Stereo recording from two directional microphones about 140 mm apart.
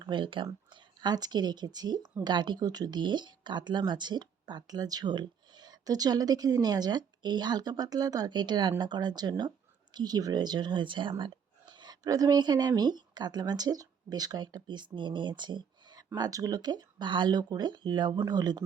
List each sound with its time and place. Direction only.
0.0 s a woman's voice: 35° right (ahead or behind)